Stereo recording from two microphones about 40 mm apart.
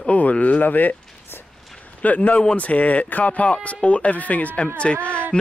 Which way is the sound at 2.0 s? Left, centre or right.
Left.